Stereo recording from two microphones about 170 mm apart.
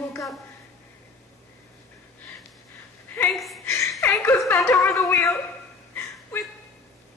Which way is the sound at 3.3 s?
Centre (ahead or behind).